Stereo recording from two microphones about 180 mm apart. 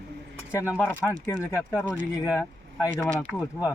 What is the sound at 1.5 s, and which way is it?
Speech, 15° left (ahead or behind).